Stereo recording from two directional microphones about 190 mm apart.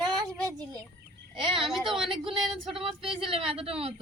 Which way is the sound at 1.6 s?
Centre (ahead or behind).